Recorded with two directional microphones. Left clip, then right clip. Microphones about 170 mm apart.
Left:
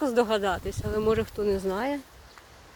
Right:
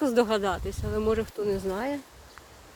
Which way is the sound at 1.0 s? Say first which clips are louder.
Left 2 dB; 10° left (ahead or behind).